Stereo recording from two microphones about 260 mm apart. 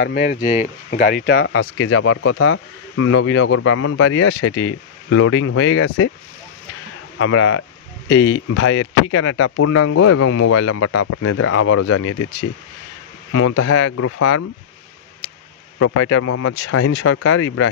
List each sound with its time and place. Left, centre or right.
0.5 s speech: left
7.2 s speech: left
13.3 s speech: left
13.7 s speech: left
15.8 s speech: left